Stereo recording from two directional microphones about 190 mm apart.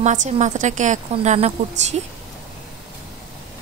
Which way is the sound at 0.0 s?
40° right (ahead or behind).